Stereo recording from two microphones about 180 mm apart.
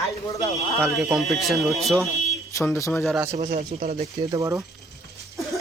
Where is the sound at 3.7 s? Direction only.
40° right (ahead or behind).